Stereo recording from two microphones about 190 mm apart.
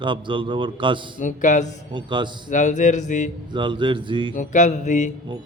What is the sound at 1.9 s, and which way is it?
Speech, 25° right (ahead or behind).